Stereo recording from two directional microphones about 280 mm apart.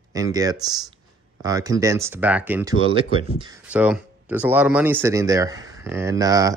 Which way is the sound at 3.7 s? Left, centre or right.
Centre.